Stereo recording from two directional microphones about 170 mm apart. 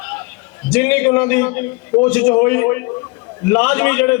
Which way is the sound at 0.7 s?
10° left (ahead or behind).